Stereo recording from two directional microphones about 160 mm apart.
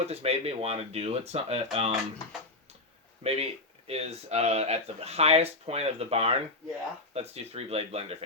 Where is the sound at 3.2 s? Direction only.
40° right (ahead or behind).